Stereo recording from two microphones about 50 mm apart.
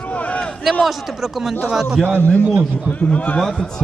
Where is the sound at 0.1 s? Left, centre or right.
Left.